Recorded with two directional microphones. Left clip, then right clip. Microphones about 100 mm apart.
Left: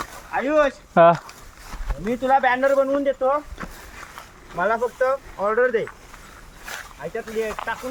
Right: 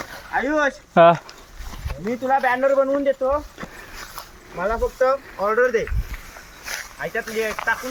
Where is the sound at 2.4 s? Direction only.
15° left (ahead or behind).